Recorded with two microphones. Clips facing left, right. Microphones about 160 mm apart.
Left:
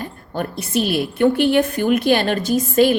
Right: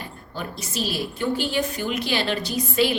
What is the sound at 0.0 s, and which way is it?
A woman's voice, 55° left (ahead or behind).